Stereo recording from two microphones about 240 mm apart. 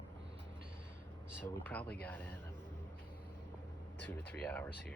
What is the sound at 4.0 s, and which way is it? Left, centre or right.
Speech, centre.